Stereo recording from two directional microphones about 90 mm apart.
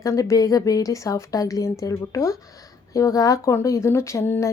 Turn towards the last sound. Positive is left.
turn(degrees=30)  # may be behind; listen again after turning